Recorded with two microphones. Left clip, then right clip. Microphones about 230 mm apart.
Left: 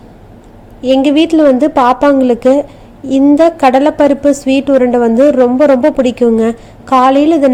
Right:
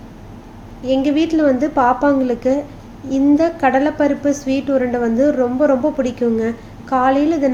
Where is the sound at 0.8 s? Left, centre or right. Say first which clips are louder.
Left 7 dB; left.